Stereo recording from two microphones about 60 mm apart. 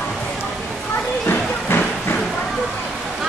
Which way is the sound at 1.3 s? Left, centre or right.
Left.